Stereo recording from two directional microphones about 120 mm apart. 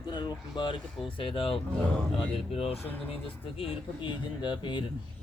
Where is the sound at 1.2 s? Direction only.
50° left (ahead or behind).